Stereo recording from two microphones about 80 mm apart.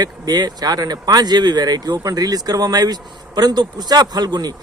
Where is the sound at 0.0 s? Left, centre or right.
Right.